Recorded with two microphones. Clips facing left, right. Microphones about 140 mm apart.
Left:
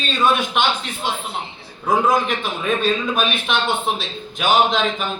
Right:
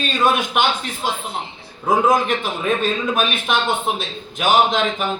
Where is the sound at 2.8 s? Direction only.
45° right (ahead or behind).